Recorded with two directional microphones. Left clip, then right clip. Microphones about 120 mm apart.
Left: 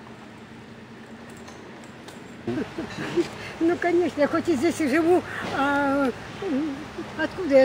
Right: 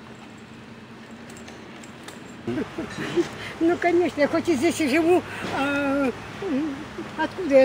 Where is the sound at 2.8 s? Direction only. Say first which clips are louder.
Right 1 dB; 15° right (ahead or behind).